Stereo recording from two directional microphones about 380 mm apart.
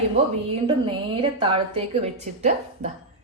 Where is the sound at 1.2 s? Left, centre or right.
Centre.